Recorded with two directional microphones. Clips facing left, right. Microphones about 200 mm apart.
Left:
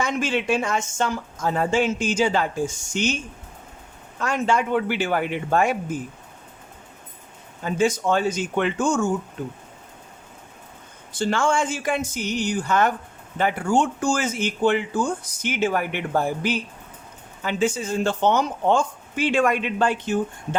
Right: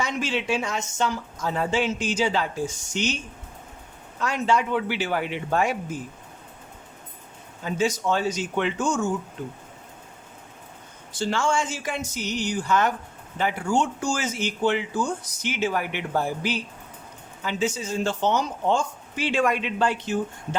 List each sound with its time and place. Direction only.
0.0 s speech: 50° left (ahead or behind)
4.2 s speech: 50° left (ahead or behind)
7.6 s speech: 50° left (ahead or behind)
11.1 s speech: 55° left (ahead or behind)